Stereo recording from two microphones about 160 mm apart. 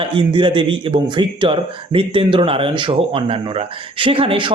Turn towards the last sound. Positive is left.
turn(degrees=-35)  # may be behind; listen again after turning